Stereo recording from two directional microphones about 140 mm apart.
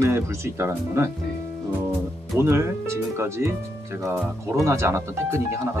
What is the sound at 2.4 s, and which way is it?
Speech, 20° right (ahead or behind).